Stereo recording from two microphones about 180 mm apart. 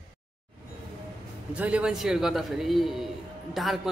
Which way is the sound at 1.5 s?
5° right (ahead or behind).